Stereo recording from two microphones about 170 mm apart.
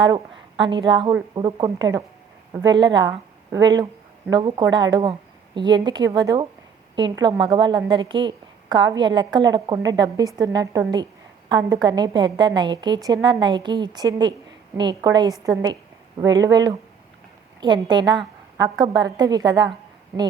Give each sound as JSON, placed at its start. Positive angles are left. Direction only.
{"t": 0.0, "sound": "a woman's voice", "side_deg": -25}